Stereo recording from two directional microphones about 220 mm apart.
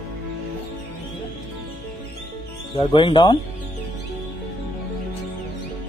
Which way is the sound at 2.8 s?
25° left (ahead or behind).